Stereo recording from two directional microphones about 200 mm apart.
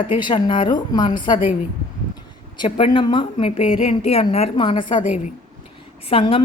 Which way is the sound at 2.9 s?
25° left (ahead or behind).